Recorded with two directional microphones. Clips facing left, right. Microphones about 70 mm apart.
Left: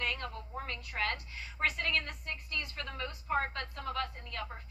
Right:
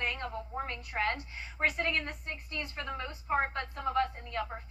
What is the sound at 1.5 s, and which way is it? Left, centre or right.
A woman's voice, right.